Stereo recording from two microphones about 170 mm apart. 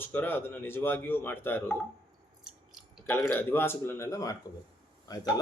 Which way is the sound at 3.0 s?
15° left (ahead or behind).